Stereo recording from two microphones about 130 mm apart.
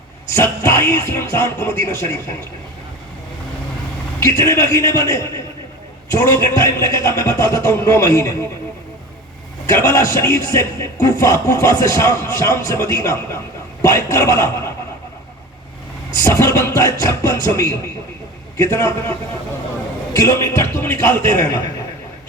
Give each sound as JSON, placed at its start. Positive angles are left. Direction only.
{"t": 0.3, "sound": "a man's voice", "side_deg": 20}
{"t": 4.2, "sound": "a man's voice", "side_deg": 25}
{"t": 9.6, "sound": "a man's voice", "side_deg": 25}
{"t": 16.2, "sound": "a man's voice", "side_deg": 25}
{"t": 20.1, "sound": "a man's voice", "side_deg": 25}